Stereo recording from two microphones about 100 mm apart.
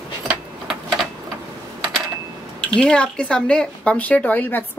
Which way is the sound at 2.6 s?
10° left (ahead or behind).